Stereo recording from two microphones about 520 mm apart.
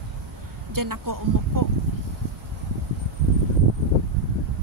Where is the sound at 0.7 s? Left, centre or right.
Right.